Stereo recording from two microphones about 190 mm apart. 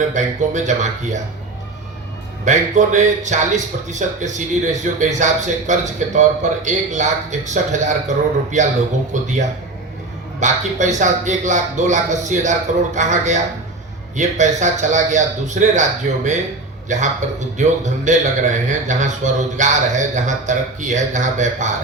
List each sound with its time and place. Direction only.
0.1 s a man's voice: 40° right (ahead or behind)
2.4 s a man's voice: 40° right (ahead or behind)
10.4 s a man's voice: 40° right (ahead or behind)